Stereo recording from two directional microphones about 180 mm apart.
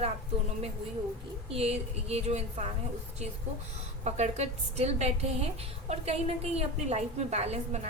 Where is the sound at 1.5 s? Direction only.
35° right (ahead or behind).